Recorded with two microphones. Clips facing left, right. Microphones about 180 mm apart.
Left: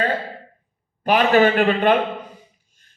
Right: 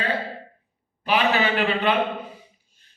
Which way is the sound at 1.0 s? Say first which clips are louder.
Left 6 dB; 50° left (ahead or behind).